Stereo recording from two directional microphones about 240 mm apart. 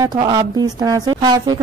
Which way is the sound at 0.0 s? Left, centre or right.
Centre.